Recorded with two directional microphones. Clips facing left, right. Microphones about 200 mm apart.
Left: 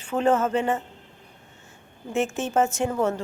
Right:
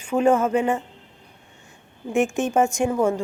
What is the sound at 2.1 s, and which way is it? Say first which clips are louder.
Speech: right 4 dB; 15° right (ahead or behind).